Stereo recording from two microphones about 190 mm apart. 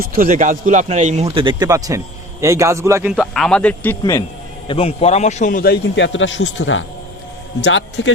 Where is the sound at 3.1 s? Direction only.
Centre (ahead or behind).